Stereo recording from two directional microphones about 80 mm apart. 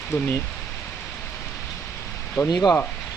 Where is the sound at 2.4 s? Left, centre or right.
Left.